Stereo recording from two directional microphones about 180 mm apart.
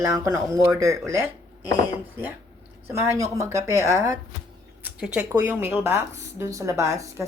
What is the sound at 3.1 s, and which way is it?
A woman's voice, 15° right (ahead or behind).